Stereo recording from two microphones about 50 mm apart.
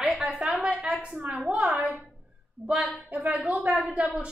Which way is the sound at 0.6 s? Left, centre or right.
Right.